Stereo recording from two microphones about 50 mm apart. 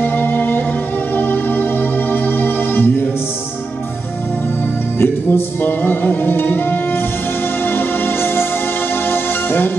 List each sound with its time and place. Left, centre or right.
0.0 s music: left
4.9 s music: left